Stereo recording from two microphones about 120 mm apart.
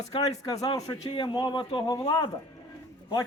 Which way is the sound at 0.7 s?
30° left (ahead or behind).